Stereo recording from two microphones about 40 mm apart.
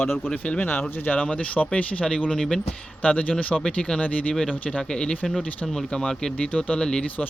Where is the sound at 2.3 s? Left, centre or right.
Centre.